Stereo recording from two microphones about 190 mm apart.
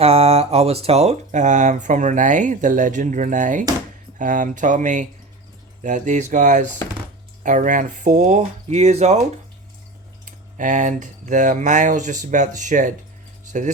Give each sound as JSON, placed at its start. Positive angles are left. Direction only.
{"t": 0.0, "sound": "speech", "side_deg": -30}
{"t": 10.6, "sound": "speech", "side_deg": -40}